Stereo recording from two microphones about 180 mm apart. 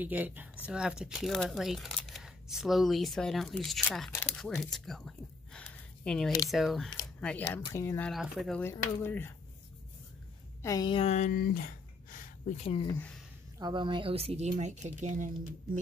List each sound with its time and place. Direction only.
0.0 s speech: 10° right (ahead or behind)
4.5 s a sound: 5° left (ahead or behind)
6.5 s speech: centre (ahead or behind)
7.4 s speech: 15° left (ahead or behind)
8.1 s speech: centre (ahead or behind)
8.5 s speech: 10° left (ahead or behind)
10.6 s a woman's voice: 20° left (ahead or behind); by 11.3 s 40° left (ahead or behind)
11.3 s a sound: 50° left (ahead or behind)
12.6 s speech: 30° left (ahead or behind)
13.6 s speech: 25° right (ahead or behind); by 15.8 s 45° right (ahead or behind)